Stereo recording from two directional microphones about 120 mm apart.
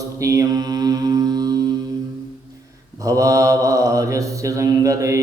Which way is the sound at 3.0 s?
25° right (ahead or behind).